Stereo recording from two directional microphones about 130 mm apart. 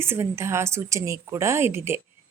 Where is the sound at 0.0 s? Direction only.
20° right (ahead or behind).